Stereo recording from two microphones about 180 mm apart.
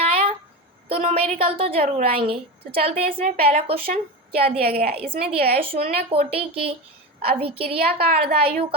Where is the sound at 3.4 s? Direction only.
35° right (ahead or behind).